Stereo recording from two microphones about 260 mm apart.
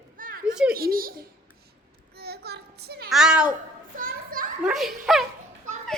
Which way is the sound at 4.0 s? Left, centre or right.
Right.